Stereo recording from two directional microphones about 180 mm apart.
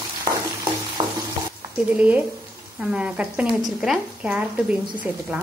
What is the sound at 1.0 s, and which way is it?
Frying, 25° right (ahead or behind).